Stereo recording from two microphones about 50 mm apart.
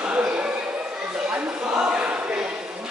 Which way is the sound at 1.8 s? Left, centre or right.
Centre.